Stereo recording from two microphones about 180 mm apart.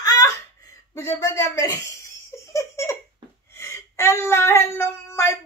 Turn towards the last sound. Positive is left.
turn(degrees=15)  # may be behind; listen again after turning